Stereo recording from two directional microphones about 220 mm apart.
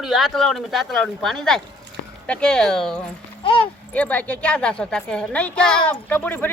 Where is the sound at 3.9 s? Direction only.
5° left (ahead or behind).